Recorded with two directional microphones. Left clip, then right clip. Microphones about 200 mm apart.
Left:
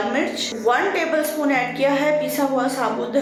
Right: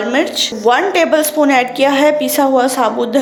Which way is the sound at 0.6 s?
45° right (ahead or behind).